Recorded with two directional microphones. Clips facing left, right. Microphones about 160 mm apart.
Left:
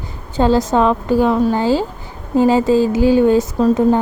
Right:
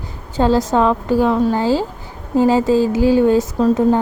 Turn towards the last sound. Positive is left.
turn(degrees=15)  # may be behind; listen again after turning